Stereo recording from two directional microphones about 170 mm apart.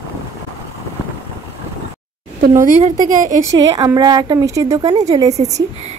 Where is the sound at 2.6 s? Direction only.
45° right (ahead or behind).